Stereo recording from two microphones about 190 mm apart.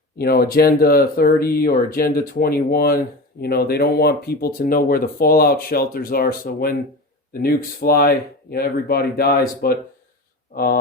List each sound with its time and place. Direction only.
0.2 s speech: 55° left (ahead or behind)